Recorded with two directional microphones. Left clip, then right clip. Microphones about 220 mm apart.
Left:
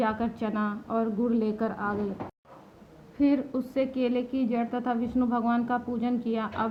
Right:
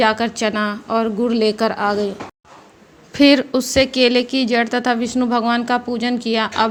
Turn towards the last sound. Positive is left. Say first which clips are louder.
# right 12 dB
turn(degrees=-30)  # may be behind; listen again after turning